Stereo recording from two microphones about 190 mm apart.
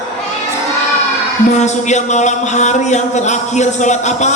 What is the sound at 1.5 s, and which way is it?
Speech, 40° left (ahead or behind).